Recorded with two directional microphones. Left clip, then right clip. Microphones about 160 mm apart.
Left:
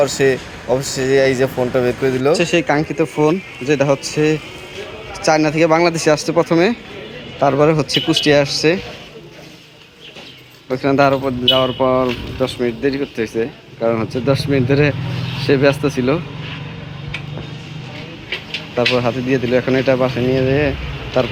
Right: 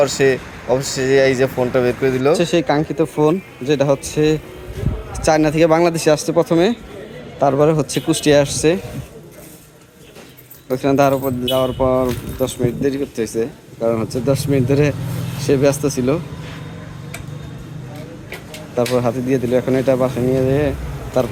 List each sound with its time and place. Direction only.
0.0 s speech: centre (ahead or behind); by 8.5 s 15° right (ahead or behind)
10.7 s speech: 15° right (ahead or behind)
18.9 s speech: 10° right (ahead or behind)